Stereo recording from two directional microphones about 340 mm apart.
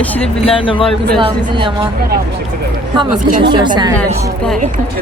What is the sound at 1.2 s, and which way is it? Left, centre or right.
Speech, centre.